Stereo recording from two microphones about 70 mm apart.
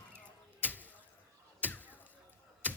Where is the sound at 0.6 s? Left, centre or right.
Left.